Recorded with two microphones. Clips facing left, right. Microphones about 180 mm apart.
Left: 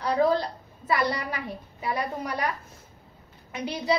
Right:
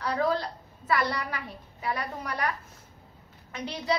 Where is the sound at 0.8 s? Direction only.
15° left (ahead or behind).